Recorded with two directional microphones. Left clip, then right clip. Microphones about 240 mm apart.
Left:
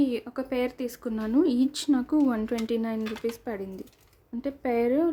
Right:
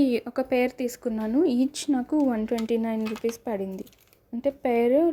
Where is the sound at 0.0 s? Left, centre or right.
Right.